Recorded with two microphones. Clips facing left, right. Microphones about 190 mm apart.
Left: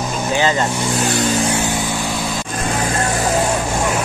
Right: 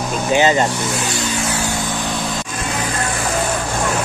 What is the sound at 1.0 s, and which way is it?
Vehicle, 50° left (ahead or behind).